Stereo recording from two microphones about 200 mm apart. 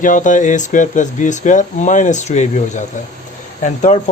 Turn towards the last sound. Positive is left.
turn(degrees=40)  # may be behind; listen again after turning